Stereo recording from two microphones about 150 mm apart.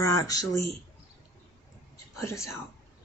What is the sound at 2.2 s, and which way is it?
Speech, 20° left (ahead or behind).